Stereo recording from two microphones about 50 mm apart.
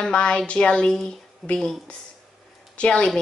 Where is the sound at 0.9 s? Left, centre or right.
Centre.